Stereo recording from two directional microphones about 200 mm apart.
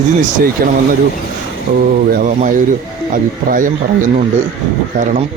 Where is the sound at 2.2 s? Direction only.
40° right (ahead or behind).